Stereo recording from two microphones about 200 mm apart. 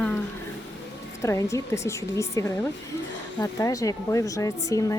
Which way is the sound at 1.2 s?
15° left (ahead or behind).